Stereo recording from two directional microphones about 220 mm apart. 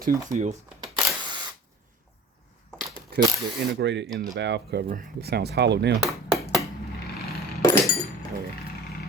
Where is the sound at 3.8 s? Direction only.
55° right (ahead or behind).